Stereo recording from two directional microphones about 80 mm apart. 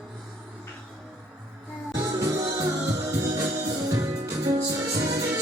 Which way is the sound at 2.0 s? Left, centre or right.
Right.